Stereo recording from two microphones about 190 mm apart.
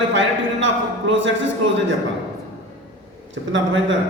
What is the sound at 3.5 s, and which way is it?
Speech, 75° right (ahead or behind).